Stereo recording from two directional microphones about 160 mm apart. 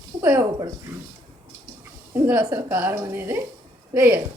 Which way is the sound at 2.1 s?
15° right (ahead or behind).